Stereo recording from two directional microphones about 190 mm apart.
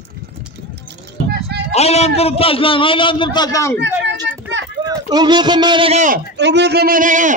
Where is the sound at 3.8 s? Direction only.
65° right (ahead or behind).